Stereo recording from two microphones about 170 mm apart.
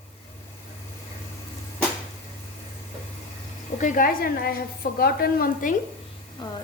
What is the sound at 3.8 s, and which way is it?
A woman's voice, 55° left (ahead or behind).